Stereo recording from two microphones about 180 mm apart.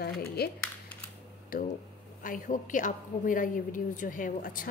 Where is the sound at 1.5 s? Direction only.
50° left (ahead or behind).